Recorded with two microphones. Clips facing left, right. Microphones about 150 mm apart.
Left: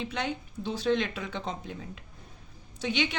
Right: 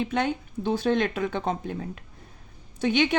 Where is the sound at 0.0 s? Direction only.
50° right (ahead or behind).